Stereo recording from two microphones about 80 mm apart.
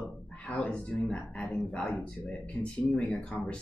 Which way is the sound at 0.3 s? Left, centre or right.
Centre.